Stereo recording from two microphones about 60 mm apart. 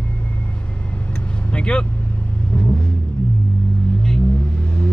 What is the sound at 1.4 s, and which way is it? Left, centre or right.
Vehicle, centre.